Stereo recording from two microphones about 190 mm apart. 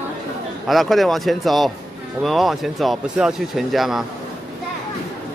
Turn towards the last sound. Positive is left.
turn(degrees=0)  # may be behind; listen again after turning